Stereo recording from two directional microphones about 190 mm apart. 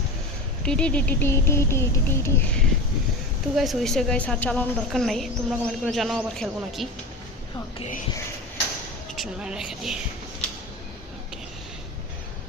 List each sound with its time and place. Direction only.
0.6 s a sound: 5° left (ahead or behind)
3.5 s a woman's voice: centre (ahead or behind)
7.8 s speech: 40° left (ahead or behind)
9.1 s a woman's voice: 5° right (ahead or behind)